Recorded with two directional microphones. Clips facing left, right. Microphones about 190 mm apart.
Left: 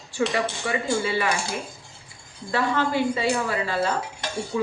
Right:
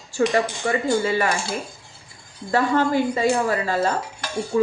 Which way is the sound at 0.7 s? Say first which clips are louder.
Right 4 dB; 40° right (ahead or behind).